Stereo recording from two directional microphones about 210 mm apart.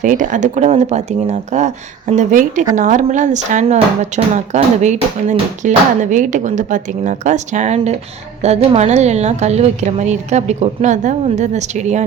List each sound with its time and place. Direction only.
0.0 s a woman's voice: 35° right (ahead or behind)